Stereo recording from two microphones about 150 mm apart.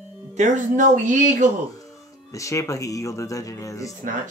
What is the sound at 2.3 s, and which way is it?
Speech, 20° left (ahead or behind).